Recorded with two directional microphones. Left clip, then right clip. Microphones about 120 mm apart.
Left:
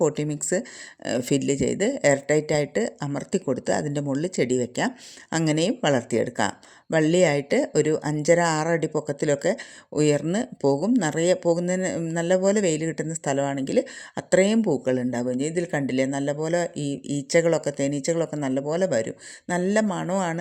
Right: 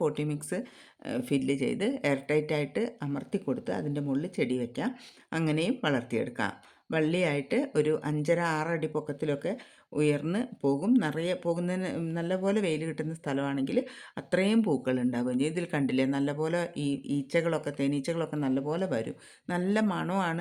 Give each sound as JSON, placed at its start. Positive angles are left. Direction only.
{"t": 0.0, "sound": "speech", "side_deg": 40}